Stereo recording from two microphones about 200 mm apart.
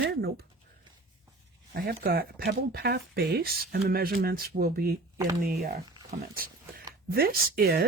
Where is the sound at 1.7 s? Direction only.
50° right (ahead or behind).